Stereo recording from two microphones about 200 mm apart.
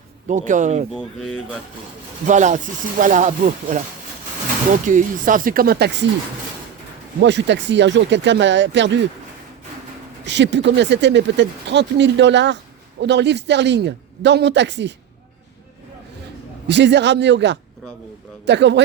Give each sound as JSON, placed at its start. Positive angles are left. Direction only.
{"t": 0.3, "sound": "speech", "side_deg": -40}
{"t": 0.9, "sound": "speech", "side_deg": 0}
{"t": 2.2, "sound": "speech", "side_deg": -35}
{"t": 4.9, "sound": "speech", "side_deg": -40}
{"t": 7.2, "sound": "speech", "side_deg": -60}
{"t": 10.2, "sound": "speech", "side_deg": -60}
{"t": 16.6, "sound": "speech", "side_deg": -60}